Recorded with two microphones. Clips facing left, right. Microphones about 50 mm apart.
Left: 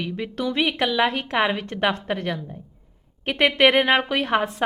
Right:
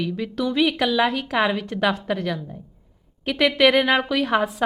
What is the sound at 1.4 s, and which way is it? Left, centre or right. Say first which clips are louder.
Speech: right 1 dB; left.